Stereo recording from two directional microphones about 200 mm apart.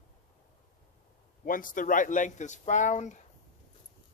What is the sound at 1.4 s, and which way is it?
Speech, 45° left (ahead or behind).